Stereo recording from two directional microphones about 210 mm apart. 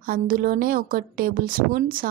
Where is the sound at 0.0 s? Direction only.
40° right (ahead or behind).